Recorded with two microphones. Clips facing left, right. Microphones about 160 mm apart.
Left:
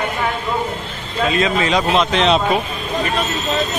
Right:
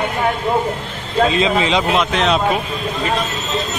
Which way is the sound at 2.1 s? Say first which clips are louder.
Left 1 dB; 5° right (ahead or behind).